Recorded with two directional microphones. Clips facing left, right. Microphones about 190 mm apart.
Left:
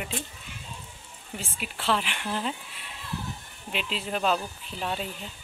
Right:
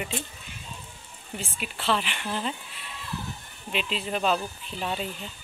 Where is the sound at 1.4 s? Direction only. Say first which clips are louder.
Right 1 dB; 5° left (ahead or behind).